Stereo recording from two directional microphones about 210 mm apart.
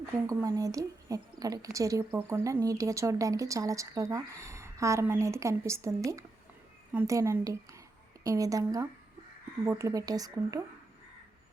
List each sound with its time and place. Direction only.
0.3 s a woman's voice: 15° right (ahead or behind)